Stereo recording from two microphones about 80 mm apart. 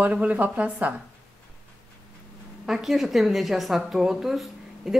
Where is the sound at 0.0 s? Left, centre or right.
Centre.